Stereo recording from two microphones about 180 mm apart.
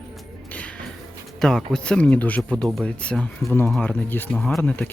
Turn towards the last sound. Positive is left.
turn(degrees=5)  # may be behind; listen again after turning